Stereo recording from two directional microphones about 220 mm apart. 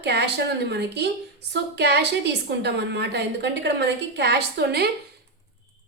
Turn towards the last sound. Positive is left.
turn(degrees=-45)  # may be behind; listen again after turning